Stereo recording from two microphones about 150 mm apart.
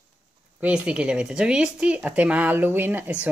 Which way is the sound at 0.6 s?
10° right (ahead or behind).